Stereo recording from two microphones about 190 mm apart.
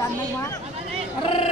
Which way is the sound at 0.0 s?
15° left (ahead or behind).